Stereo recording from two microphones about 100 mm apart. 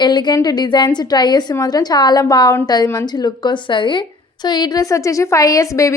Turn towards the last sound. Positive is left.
turn(degrees=30)  # may be behind; listen again after turning